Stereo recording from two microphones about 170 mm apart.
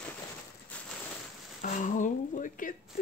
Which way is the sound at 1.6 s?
50° left (ahead or behind).